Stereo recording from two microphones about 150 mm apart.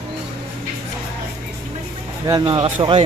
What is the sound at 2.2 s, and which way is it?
Speech, 25° right (ahead or behind).